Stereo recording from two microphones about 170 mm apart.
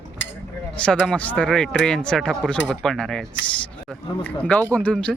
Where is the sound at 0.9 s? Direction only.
5° left (ahead or behind).